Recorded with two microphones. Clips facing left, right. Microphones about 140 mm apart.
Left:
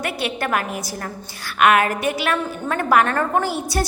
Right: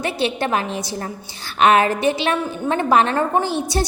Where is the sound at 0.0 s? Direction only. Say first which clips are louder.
Right 3 dB; 25° right (ahead or behind).